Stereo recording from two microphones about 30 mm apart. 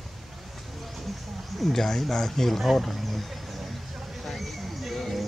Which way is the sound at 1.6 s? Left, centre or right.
Centre.